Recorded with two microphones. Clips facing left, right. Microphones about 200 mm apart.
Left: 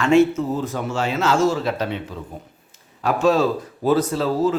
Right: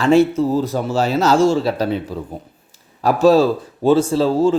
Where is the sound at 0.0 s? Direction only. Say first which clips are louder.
Right 2 dB; 35° right (ahead or behind).